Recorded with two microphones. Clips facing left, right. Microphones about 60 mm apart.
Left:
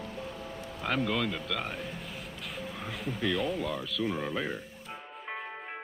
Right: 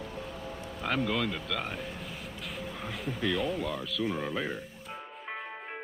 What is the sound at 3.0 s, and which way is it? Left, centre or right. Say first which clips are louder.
Speech: even; centre.